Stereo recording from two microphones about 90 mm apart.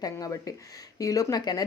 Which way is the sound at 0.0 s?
40° left (ahead or behind).